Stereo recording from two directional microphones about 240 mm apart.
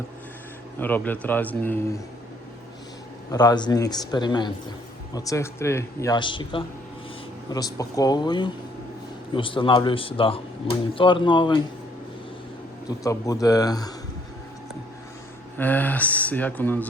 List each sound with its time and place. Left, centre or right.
0.8 s a man's voice: centre
3.3 s a man's voice: centre
12.9 s a man's voice: centre
15.5 s a man's voice: centre